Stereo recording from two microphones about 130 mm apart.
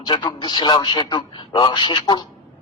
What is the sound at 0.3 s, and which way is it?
A man's voice, 35° left (ahead or behind).